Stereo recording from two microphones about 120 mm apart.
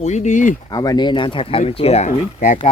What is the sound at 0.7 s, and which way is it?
Speech, 35° left (ahead or behind).